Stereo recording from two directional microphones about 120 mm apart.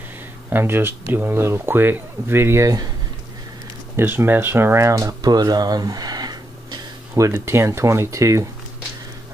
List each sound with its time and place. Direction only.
0.5 s speech: 20° right (ahead or behind)
3.9 s speech: 20° right (ahead or behind)